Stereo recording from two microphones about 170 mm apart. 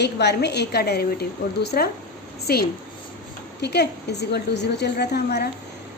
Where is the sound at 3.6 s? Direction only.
75° left (ahead or behind).